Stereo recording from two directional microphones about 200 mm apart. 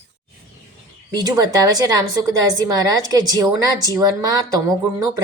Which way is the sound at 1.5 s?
20° right (ahead or behind).